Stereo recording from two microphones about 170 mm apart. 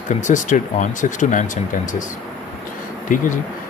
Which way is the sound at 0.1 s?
45° left (ahead or behind).